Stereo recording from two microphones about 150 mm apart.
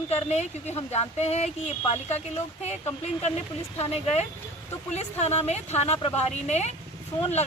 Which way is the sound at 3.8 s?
45° left (ahead or behind).